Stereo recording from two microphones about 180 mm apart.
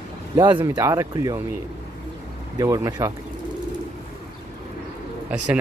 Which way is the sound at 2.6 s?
20° right (ahead or behind).